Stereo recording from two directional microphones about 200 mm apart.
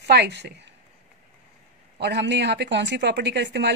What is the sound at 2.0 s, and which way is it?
A woman's voice, 60° right (ahead or behind).